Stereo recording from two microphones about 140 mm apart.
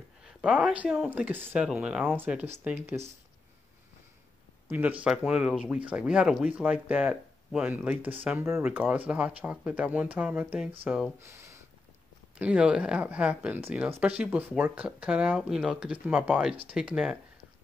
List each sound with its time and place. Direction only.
0.2 s speech: 5° right (ahead or behind)
4.6 s speech: 10° right (ahead or behind)
11.1 s a sound: 20° right (ahead or behind)
12.4 s speech: 10° right (ahead or behind)